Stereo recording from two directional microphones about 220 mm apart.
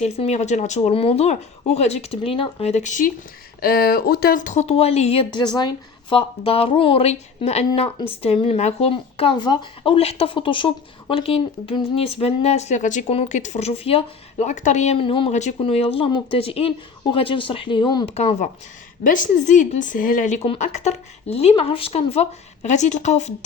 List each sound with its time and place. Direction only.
0.0 s speech: 30° left (ahead or behind)